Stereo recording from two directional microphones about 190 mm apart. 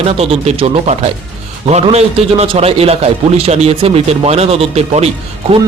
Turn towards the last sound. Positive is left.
turn(degrees=-30)  # may be behind; listen again after turning